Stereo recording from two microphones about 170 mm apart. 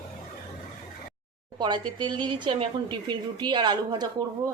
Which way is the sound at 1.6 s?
25° right (ahead or behind).